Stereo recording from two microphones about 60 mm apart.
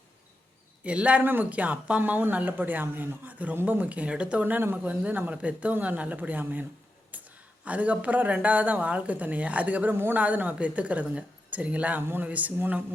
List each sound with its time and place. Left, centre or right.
0.9 s speech: right
7.1 s a sound: right
7.6 s speech: right
9.9 s speech: right
10.2 s speech: right